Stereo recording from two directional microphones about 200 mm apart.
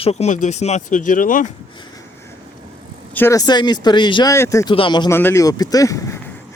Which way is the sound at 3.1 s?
10° left (ahead or behind).